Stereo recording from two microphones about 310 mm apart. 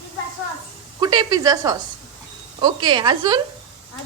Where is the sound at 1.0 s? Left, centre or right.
Centre.